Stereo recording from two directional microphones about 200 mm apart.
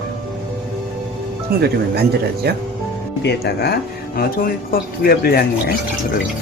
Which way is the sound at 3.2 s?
55° left (ahead or behind).